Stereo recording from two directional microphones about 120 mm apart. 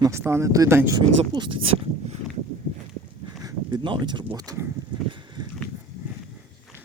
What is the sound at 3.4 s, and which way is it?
Speech, 40° right (ahead or behind).